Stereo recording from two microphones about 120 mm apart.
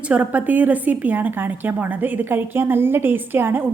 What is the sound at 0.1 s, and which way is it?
A woman's voice, 15° right (ahead or behind).